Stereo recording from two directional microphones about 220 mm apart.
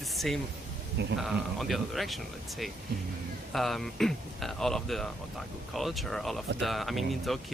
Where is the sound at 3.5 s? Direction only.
Centre (ahead or behind).